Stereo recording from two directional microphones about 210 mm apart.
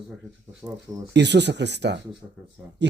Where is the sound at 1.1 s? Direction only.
55° right (ahead or behind).